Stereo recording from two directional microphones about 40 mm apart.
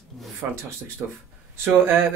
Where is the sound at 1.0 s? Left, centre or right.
Right.